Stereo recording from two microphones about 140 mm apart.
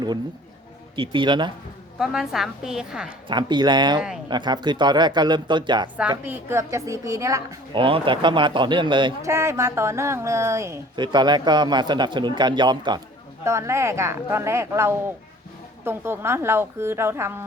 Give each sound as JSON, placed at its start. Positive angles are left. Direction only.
{"t": 0.9, "sound": "speech", "side_deg": -35}
{"t": 2.0, "sound": "a woman's voice", "side_deg": -5}
{"t": 3.2, "sound": "speech", "side_deg": -30}
{"t": 6.2, "sound": "speech", "side_deg": -15}
{"t": 7.7, "sound": "speech", "side_deg": -40}
{"t": 9.2, "sound": "speech", "side_deg": -20}
{"t": 10.9, "sound": "speech", "side_deg": -30}
{"t": 13.4, "sound": "speech", "side_deg": -20}